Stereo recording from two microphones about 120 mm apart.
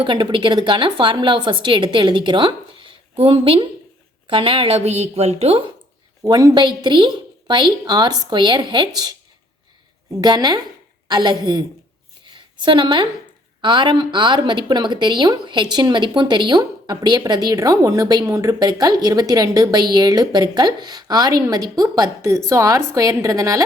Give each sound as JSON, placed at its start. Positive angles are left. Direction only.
{"t": 0.0, "sound": "a woman's voice", "side_deg": -40}
{"t": 6.2, "sound": "a woman's voice", "side_deg": -35}
{"t": 10.2, "sound": "a woman's voice", "side_deg": -35}
{"t": 12.3, "sound": "a sound", "side_deg": -40}
{"t": 13.6, "sound": "a woman's voice", "side_deg": -40}